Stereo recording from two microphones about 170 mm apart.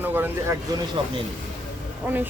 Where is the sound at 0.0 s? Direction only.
10° right (ahead or behind).